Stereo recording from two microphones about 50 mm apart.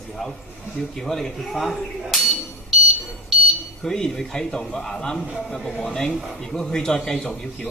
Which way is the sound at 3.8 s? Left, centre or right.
Centre.